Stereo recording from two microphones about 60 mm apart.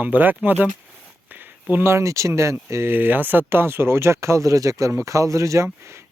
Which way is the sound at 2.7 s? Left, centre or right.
Right.